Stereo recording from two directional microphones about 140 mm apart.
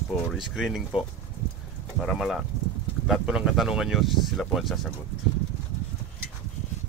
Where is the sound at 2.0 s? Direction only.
Centre (ahead or behind).